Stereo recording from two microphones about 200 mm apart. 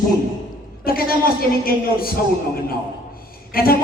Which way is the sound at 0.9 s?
45° left (ahead or behind).